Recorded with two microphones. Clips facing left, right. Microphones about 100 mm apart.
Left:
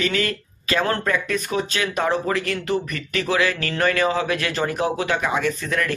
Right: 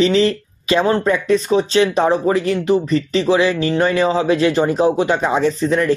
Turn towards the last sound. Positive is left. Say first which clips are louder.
# right 7 dB
turn(degrees=-25)  # may be behind; listen again after turning